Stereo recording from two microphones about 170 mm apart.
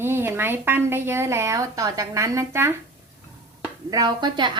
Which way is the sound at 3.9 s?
25° right (ahead or behind).